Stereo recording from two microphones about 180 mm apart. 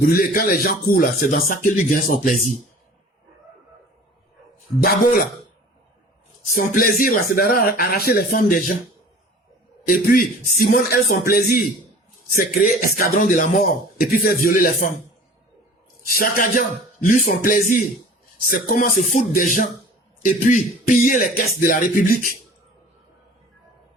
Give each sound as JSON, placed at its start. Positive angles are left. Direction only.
{"t": 0.0, "sound": "speech", "side_deg": 50}
{"t": 4.8, "sound": "speech", "side_deg": 55}
{"t": 6.5, "sound": "speech", "side_deg": 50}
{"t": 9.8, "sound": "speech", "side_deg": 50}
{"t": 16.1, "sound": "speech", "side_deg": 55}